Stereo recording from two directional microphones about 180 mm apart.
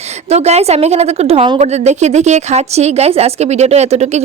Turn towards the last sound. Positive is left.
turn(degrees=-35)  # may be behind; listen again after turning